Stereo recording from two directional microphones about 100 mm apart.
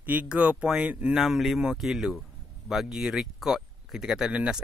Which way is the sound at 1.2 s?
Centre (ahead or behind).